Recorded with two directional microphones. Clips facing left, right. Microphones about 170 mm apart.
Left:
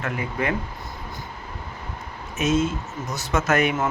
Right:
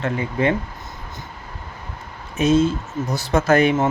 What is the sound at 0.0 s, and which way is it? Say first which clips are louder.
Speech: right 6 dB; 30° right (ahead or behind).